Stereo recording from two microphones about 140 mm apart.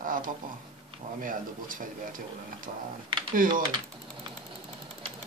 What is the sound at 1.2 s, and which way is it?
Speech, 75° right (ahead or behind).